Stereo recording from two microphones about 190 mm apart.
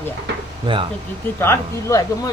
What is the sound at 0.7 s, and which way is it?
Speech, 25° right (ahead or behind).